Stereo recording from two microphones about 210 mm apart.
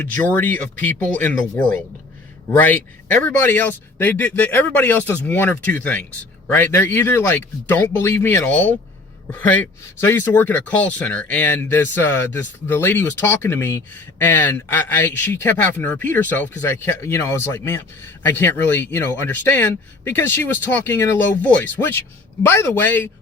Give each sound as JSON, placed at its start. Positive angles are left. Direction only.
{"t": 0.2, "sound": "speech", "side_deg": 10}
{"t": 2.6, "sound": "speech", "side_deg": 10}